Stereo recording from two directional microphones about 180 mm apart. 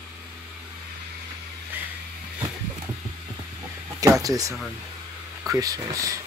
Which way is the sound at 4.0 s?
20° right (ahead or behind).